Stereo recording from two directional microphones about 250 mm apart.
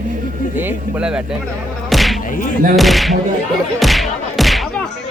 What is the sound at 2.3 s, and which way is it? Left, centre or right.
Speech, left.